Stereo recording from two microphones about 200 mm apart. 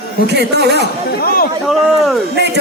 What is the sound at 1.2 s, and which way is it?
Speech, 50° left (ahead or behind).